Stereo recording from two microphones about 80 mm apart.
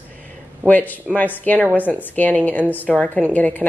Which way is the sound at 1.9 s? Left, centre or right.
Left.